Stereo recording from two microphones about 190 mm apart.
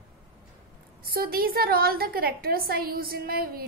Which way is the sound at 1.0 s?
50° right (ahead or behind).